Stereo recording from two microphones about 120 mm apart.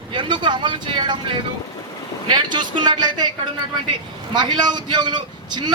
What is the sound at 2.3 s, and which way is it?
Speech, 40° right (ahead or behind).